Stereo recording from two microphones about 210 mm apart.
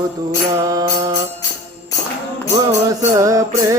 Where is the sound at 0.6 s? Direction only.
15° right (ahead or behind).